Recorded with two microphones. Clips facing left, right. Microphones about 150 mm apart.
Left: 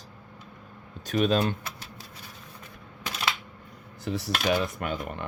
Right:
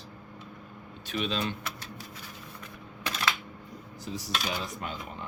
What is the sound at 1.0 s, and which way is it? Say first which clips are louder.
Speech: left 7 dB; 45° left (ahead or behind).